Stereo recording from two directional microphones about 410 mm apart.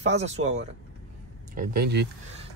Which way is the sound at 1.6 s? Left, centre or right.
Right.